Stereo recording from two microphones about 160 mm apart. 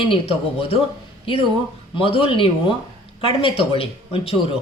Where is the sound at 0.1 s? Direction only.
35° left (ahead or behind).